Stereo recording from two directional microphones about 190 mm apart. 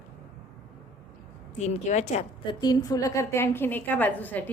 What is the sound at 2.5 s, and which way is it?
A woman's voice, 20° left (ahead or behind).